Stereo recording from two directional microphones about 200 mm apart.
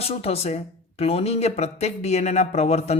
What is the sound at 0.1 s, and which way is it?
Speech, 30° left (ahead or behind).